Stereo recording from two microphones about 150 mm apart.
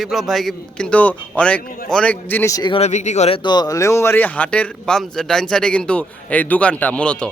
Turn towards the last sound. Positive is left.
turn(degrees=10)  # may be behind; listen again after turning